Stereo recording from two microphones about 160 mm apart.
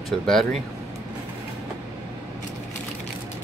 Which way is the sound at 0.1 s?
Centre (ahead or behind).